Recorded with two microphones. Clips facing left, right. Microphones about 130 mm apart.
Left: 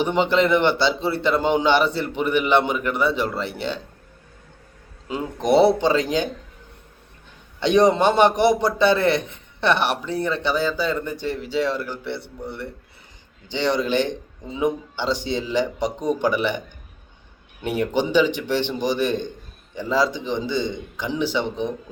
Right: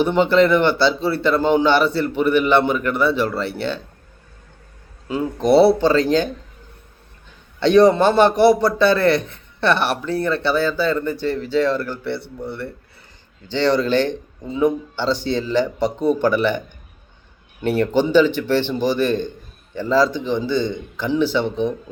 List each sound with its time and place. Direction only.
0.0 s a man's voice: 15° left (ahead or behind)
5.0 s a man's voice: 20° left (ahead or behind)
7.6 s a man's voice: 20° left (ahead or behind)